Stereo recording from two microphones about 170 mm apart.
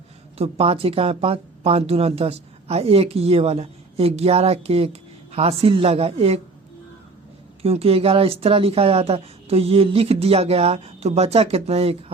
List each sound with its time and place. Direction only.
0.3 s speech: 35° right (ahead or behind)
7.6 s speech: 35° right (ahead or behind)